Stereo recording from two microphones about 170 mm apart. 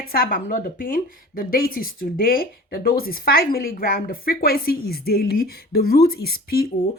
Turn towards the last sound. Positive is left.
turn(degrees=60)  # may be behind; listen again after turning